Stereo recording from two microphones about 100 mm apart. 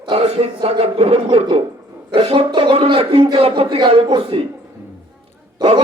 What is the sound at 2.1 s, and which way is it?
A man's voice, 65° right (ahead or behind).